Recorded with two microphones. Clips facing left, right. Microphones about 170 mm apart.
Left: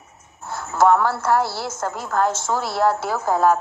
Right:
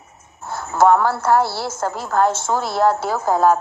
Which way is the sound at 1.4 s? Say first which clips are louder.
Right 3 dB; 30° right (ahead or behind).